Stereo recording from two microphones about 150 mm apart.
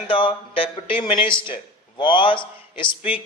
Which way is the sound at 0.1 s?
35° left (ahead or behind).